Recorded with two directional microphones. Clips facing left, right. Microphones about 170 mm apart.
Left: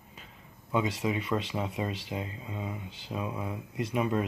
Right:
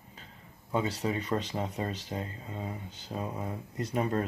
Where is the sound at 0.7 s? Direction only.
35° right (ahead or behind).